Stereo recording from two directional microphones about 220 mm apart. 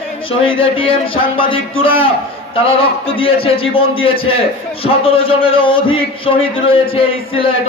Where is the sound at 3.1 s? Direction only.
25° left (ahead or behind).